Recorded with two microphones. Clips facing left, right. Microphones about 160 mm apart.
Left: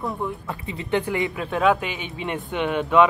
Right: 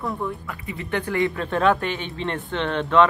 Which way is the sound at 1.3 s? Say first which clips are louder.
Left 3 dB; 5° left (ahead or behind).